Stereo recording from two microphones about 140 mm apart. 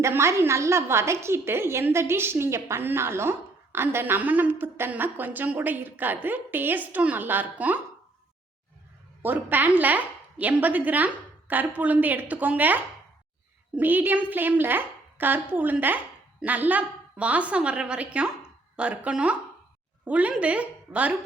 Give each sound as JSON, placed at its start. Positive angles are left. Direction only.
{"t": 0.0, "sound": "a woman's voice", "side_deg": -20}
{"t": 9.2, "sound": "a woman's voice", "side_deg": -15}